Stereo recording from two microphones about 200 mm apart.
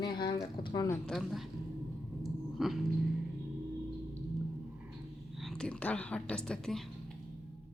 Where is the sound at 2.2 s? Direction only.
Centre (ahead or behind).